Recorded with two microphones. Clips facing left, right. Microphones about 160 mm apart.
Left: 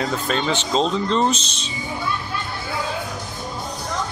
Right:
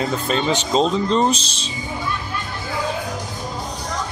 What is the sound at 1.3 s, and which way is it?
Speech, 35° right (ahead or behind).